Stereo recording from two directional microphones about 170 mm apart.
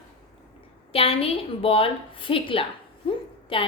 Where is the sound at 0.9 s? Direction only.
35° left (ahead or behind).